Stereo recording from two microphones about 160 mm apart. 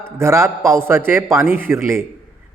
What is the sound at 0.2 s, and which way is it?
A man's voice, 15° right (ahead or behind).